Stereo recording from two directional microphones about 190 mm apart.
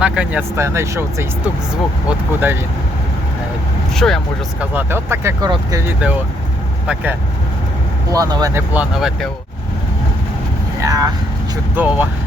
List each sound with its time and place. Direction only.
0.0 s speech: 5° right (ahead or behind)
3.9 s speech: centre (ahead or behind)
4.6 s speech: 10° right (ahead or behind)
10.8 s vehicle: 20° right (ahead or behind)
11.7 s speech: 10° right (ahead or behind)